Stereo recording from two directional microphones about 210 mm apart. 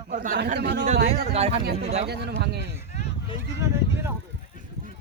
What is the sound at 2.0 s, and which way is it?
Speech, 50° right (ahead or behind).